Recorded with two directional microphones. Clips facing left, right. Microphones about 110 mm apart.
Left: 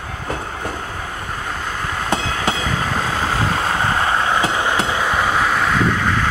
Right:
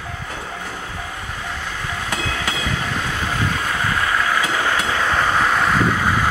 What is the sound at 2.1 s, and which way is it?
Train, 25° left (ahead or behind).